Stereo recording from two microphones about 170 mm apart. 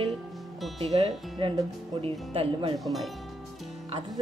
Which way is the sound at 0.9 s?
30° right (ahead or behind).